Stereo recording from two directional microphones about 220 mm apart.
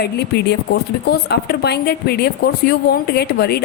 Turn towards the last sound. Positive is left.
turn(degrees=45)  # may be behind; listen again after turning